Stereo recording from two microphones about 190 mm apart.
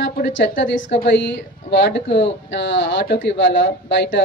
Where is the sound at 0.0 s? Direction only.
65° left (ahead or behind).